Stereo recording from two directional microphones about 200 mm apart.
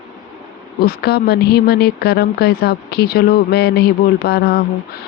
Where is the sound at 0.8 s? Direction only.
50° left (ahead or behind).